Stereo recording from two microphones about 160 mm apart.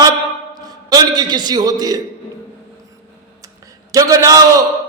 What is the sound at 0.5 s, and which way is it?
A man's voice, 25° right (ahead or behind).